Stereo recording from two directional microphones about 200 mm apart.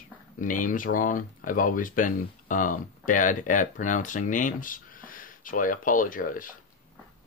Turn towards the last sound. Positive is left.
turn(degrees=40)  # may be behind; listen again after turning